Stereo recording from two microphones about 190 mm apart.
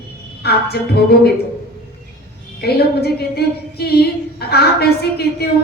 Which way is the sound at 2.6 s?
55° left (ahead or behind).